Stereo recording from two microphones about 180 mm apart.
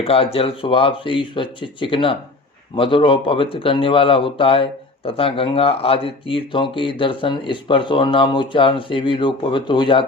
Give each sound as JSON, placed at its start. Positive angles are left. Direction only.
{"t": 0.0, "sound": "speech", "side_deg": 30}